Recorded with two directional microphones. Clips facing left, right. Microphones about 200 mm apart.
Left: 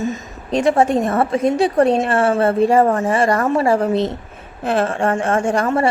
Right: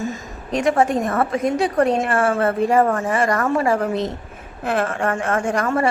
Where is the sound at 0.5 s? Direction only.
30° left (ahead or behind).